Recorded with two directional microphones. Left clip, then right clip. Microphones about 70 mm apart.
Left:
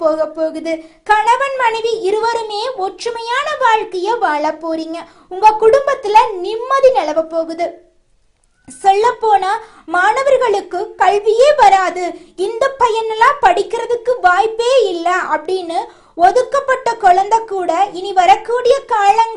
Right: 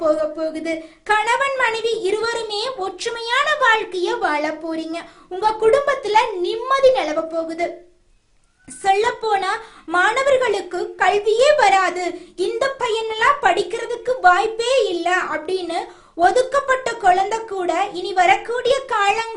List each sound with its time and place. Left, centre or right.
0.0 s a woman's voice: left
1.6 s a woman's voice: left
2.8 s a woman's voice: left
8.8 s a woman's voice: left
12.8 s a child's voice: left
15.6 s a child's voice: left
16.2 s a woman's voice: left
17.6 s a woman's voice: left